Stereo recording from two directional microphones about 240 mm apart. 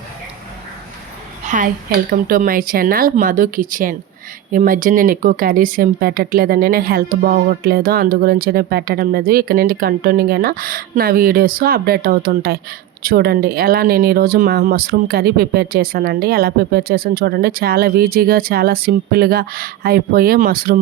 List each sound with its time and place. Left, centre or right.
1.5 s a woman's voice: right